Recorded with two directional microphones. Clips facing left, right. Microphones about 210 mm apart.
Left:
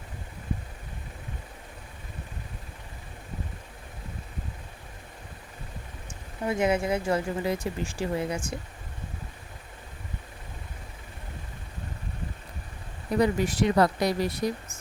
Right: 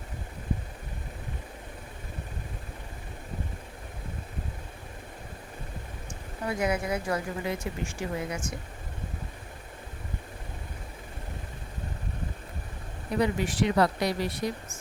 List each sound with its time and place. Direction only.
6.4 s speech: 25° left (ahead or behind)
13.1 s speech: 40° left (ahead or behind)